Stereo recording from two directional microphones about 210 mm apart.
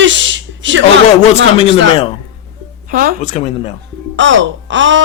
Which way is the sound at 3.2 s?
35° left (ahead or behind).